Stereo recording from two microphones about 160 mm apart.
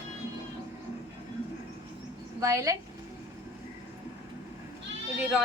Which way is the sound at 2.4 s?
20° right (ahead or behind).